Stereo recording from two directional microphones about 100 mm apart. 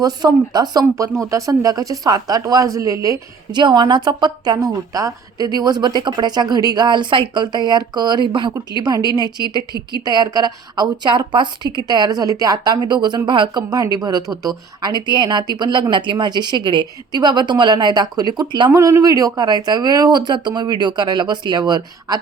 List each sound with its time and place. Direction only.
0.0 s speech: 40° right (ahead or behind)
3.5 s a woman's voice: 50° right (ahead or behind)
4.5 s a woman's voice: 35° right (ahead or behind); by 8.5 s 50° right (ahead or behind)
8.7 s a woman's voice: 40° right (ahead or behind)
18.7 s a woman's voice: 30° right (ahead or behind)